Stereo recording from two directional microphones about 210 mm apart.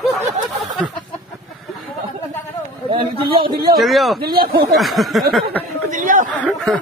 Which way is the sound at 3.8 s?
Centre (ahead or behind).